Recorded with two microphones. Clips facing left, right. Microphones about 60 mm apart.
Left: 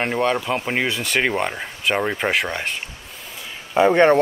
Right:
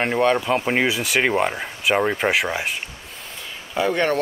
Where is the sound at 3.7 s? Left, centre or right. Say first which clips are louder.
Left 6 dB; left.